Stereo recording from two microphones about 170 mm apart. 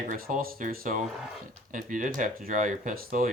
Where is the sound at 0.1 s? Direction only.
55° right (ahead or behind).